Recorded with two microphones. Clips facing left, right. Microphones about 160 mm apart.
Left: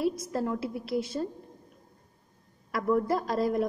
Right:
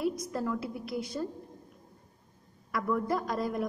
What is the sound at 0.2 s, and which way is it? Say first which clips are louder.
A woman's voice: left 2 dB; 25° left (ahead or behind).